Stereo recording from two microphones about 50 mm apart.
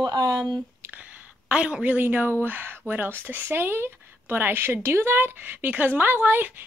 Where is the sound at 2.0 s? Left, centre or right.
Right.